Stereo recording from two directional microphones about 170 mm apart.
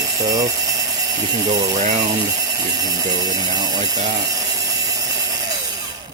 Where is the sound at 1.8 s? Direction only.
45° right (ahead or behind).